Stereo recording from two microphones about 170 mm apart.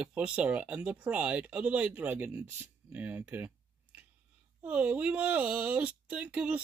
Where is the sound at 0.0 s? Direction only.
5° right (ahead or behind).